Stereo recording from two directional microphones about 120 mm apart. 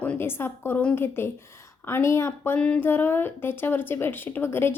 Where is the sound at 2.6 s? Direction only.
10° left (ahead or behind).